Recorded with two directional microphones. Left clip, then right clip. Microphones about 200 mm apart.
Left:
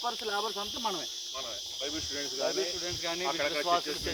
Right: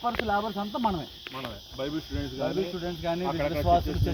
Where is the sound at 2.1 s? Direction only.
50° right (ahead or behind).